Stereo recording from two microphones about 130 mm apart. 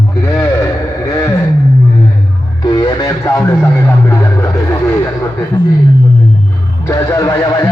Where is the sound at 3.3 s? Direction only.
20° left (ahead or behind).